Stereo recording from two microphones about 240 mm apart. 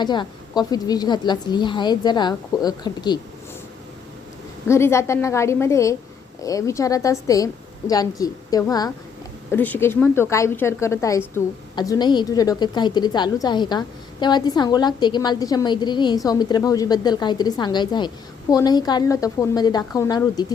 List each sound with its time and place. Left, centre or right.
0.0 s a woman's voice: centre
4.7 s a woman's voice: centre